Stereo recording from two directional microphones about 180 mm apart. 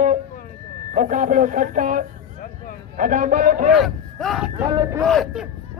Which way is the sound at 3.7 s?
Centre (ahead or behind).